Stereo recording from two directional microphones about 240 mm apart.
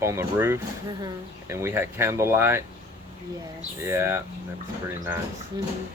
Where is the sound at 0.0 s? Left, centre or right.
Centre.